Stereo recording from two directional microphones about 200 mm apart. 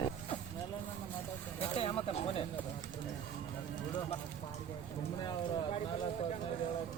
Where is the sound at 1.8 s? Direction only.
30° left (ahead or behind).